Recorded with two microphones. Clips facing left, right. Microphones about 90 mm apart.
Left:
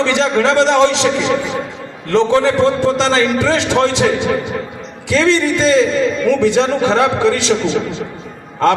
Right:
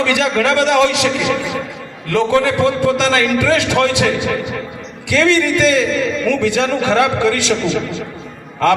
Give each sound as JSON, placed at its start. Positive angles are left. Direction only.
{"t": 0.0, "sound": "a man's voice", "side_deg": 30}